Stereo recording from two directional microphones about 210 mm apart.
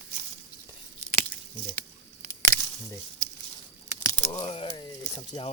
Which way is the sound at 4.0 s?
15° left (ahead or behind).